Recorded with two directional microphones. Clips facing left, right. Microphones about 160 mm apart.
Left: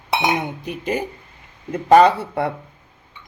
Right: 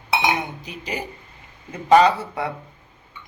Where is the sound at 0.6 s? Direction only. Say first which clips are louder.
Left 7 dB; 55° left (ahead or behind).